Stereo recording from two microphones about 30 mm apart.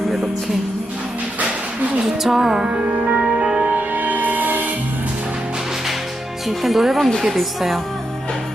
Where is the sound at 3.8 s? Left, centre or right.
Right.